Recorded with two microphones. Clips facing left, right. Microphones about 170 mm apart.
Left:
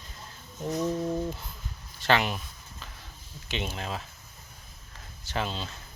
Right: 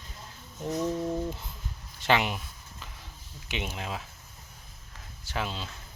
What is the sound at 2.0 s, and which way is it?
Speech, 15° right (ahead or behind).